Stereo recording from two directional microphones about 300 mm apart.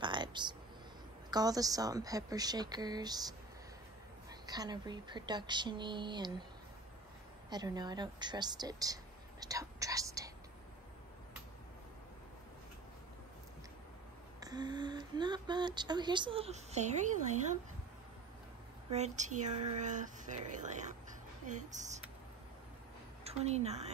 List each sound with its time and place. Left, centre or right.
0.0 s a sound: centre
1.3 s speech: centre
7.4 s a woman's voice: centre
14.4 s speech: centre
18.9 s speech: right
23.2 s a woman's voice: right